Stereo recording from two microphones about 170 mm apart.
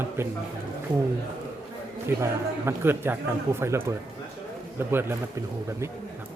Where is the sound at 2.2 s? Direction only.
15° right (ahead or behind).